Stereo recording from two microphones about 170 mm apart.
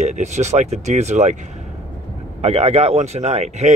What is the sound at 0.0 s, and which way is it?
Speech, 40° right (ahead or behind).